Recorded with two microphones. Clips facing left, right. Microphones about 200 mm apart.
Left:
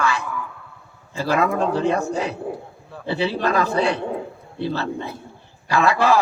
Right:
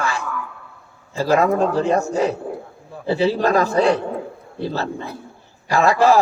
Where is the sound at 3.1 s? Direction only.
45° right (ahead or behind).